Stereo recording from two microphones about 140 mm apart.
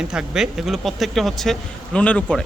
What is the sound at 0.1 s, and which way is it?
Speech, 5° right (ahead or behind).